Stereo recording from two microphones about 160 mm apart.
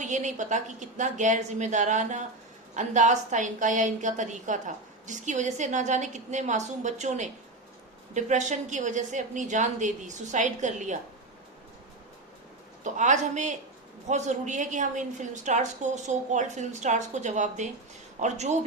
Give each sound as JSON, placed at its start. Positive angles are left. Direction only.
{"t": 0.0, "sound": "a woman's voice", "side_deg": -50}
{"t": 12.8, "sound": "a woman's voice", "side_deg": -50}